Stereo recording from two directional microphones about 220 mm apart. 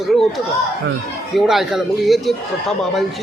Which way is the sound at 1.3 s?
Centre (ahead or behind).